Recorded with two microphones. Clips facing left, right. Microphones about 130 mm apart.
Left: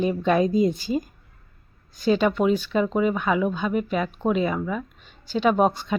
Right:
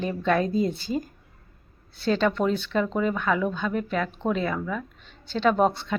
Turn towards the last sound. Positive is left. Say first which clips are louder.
# left 1 dB
turn(degrees=15)  # may be behind; listen again after turning